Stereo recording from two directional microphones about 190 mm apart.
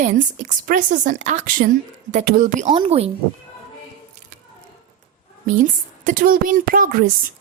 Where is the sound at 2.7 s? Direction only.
30° right (ahead or behind).